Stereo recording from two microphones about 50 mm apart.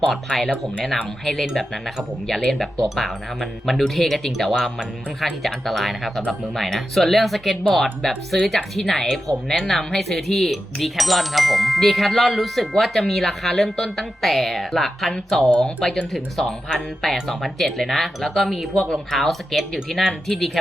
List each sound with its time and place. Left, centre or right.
0.1 s speech: centre
15.4 s speech: centre